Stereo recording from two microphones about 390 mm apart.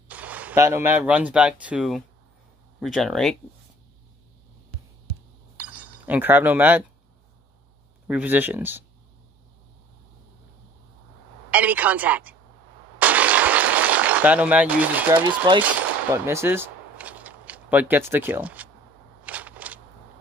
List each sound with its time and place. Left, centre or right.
0.1 s a woman's voice: centre
5.8 s speech: centre
8.1 s a woman's voice: centre
11.5 s a woman's voice: centre
13.0 s a sound: centre